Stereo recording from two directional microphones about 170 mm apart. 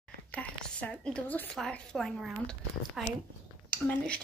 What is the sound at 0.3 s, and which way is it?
A woman's voice, 10° left (ahead or behind).